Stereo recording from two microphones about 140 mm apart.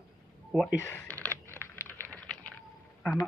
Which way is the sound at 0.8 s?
15° left (ahead or behind).